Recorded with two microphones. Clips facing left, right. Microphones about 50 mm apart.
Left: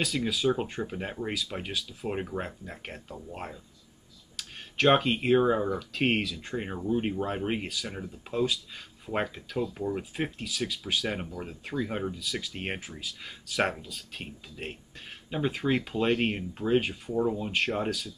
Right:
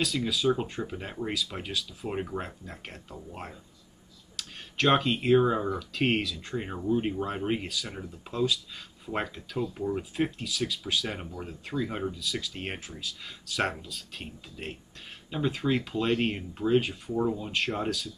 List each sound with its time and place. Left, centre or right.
0.0 s speech: centre